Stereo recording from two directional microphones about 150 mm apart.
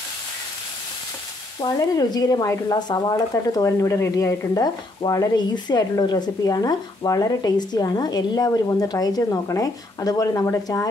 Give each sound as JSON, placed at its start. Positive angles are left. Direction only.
{"t": 1.6, "sound": "speech", "side_deg": 25}